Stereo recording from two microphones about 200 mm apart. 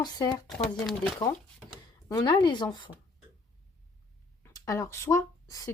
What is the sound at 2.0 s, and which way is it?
Speech, 20° left (ahead or behind).